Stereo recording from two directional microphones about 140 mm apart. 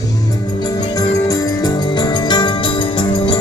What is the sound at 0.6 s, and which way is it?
Music, 30° left (ahead or behind).